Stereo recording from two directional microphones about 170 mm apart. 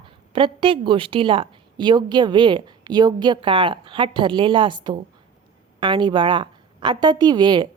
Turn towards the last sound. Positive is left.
turn(degrees=-25)  # may be behind; listen again after turning